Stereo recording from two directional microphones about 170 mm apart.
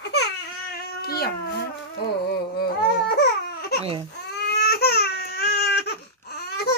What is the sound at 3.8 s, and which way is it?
Baby cry, 35° right (ahead or behind).